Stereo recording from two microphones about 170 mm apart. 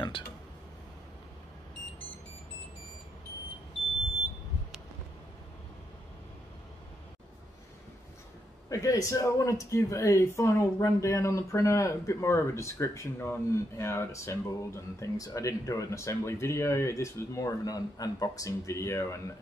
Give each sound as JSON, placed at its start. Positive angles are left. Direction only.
{"t": 8.6, "sound": "speech", "side_deg": 20}